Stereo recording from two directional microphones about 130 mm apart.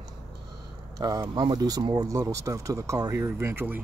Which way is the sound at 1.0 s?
30° right (ahead or behind).